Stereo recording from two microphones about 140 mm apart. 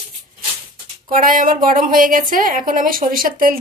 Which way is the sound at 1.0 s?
75° right (ahead or behind).